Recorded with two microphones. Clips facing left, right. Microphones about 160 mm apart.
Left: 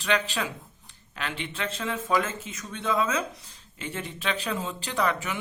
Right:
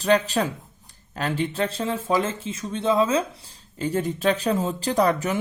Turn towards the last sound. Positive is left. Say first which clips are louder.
# right 7 dB
turn(degrees=-40)  # may be behind; listen again after turning